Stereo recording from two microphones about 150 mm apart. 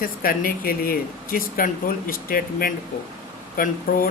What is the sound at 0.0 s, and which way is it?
Speech, 75° left (ahead or behind).